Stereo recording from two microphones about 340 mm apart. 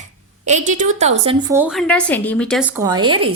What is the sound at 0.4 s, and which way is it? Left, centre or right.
A woman's voice, right.